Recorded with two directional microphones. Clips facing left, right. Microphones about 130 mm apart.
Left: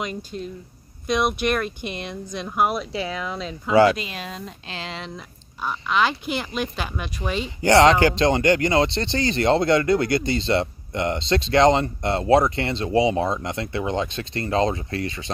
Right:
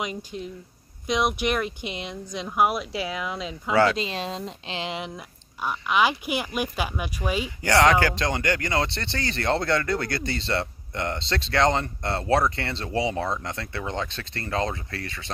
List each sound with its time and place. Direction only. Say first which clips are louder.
0.0 s speech: left 2 dB; 15° right (ahead or behind)
3.7 s speech: left 5 dB; 20° left (ahead or behind)
4.0 s speech: right 3 dB; 25° right (ahead or behind); by 7.5 s 10° right (ahead or behind)
7.6 s speech: left 5 dB; 25° left (ahead or behind)